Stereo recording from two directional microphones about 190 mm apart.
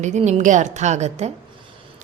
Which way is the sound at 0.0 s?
40° right (ahead or behind).